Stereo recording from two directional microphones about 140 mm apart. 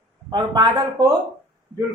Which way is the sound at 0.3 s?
30° right (ahead or behind).